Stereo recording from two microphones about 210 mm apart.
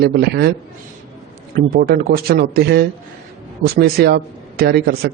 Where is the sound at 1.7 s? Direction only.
45° right (ahead or behind).